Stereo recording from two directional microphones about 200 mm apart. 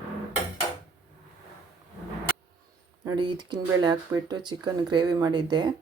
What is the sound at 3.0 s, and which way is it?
Speech, 20° right (ahead or behind).